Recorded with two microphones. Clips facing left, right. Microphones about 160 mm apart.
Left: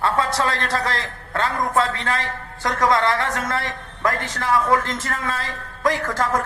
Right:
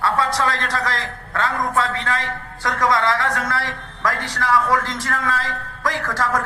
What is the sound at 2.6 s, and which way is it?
A woman's voice, 25° left (ahead or behind).